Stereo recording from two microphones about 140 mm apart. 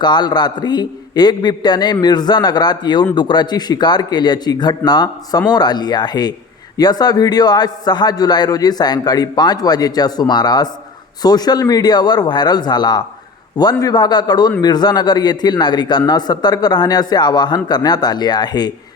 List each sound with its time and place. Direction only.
0.0 s a man's voice: 30° left (ahead or behind)